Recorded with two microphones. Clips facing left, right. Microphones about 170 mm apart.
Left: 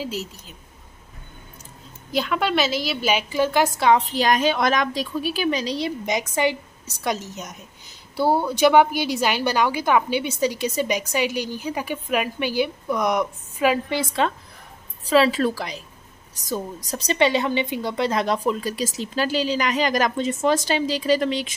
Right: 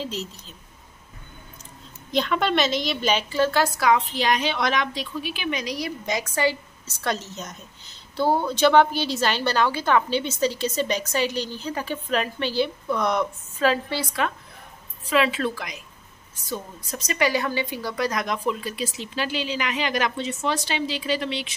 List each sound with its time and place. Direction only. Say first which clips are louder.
0.0 s a woman's voice: left 2 dB; 10° left (ahead or behind)
2.0 s a woman's voice: even; 5° left (ahead or behind); by 4.0 s 25° left (ahead or behind)
4.1 s a woman's voice: left 4 dB; 45° left (ahead or behind); by 14.2 s 20° left (ahead or behind)
15.0 s speech: left 4 dB; 35° left (ahead or behind)